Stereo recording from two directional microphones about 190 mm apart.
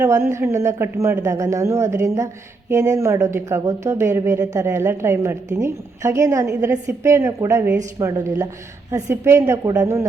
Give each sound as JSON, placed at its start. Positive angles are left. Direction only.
{"t": 0.0, "sound": "speech", "side_deg": -15}